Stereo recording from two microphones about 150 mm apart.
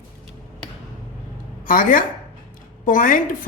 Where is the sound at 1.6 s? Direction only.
65° left (ahead or behind).